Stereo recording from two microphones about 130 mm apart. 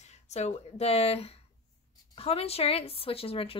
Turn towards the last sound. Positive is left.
turn(degrees=45)  # may be behind; listen again after turning